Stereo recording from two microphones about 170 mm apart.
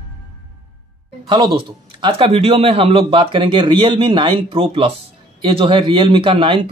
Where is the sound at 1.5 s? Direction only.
35° right (ahead or behind).